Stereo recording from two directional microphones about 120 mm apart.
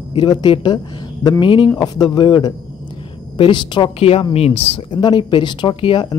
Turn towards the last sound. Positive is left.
turn(degrees=45)  # may be behind; listen again after turning